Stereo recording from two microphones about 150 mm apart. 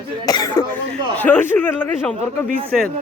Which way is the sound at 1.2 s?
10° left (ahead or behind).